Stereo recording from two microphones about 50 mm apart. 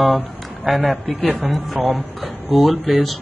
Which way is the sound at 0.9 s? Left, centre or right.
Left.